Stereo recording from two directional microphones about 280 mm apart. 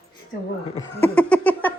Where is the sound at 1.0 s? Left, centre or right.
Centre.